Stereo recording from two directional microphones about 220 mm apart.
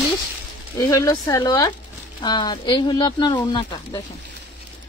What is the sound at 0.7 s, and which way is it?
Speech, 15° left (ahead or behind).